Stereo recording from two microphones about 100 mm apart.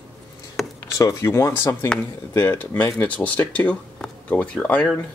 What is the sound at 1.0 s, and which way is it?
Speech, 30° left (ahead or behind).